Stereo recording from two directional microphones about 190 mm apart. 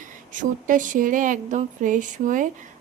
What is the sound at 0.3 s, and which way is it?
Speech, 45° right (ahead or behind).